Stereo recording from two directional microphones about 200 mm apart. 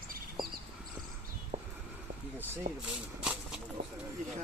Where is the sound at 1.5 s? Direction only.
30° right (ahead or behind).